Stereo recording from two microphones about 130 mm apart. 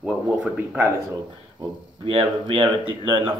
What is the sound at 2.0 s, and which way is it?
Speech, 45° right (ahead or behind).